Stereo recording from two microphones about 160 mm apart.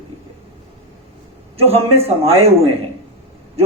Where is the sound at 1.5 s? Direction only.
40° right (ahead or behind).